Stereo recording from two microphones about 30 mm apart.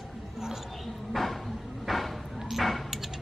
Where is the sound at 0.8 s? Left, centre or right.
Centre.